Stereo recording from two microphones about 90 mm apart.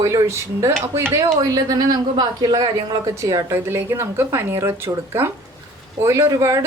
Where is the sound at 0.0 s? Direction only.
35° right (ahead or behind); by 3.0 s 50° right (ahead or behind).